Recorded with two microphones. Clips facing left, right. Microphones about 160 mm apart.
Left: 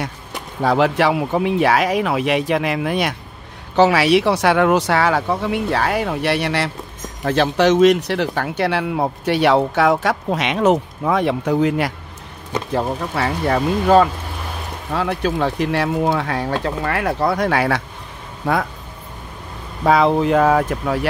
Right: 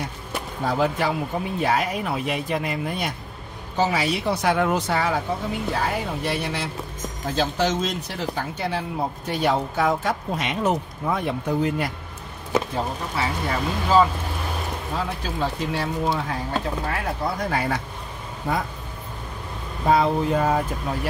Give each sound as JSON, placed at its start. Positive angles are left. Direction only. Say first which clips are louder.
{"t": 0.7, "sound": "speech", "louder": "left 7 dB", "side_deg": 80}
{"t": 3.7, "sound": "speech", "louder": "left 9 dB", "side_deg": 75}
{"t": 12.7, "sound": "speech", "louder": "left 6 dB", "side_deg": 60}
{"t": 18.4, "sound": "speech", "louder": "left 6 dB", "side_deg": 75}
{"t": 19.8, "sound": "speech", "louder": "left 5 dB", "side_deg": 90}